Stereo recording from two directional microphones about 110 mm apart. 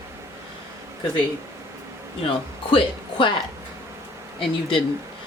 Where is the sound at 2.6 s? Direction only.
50° left (ahead or behind).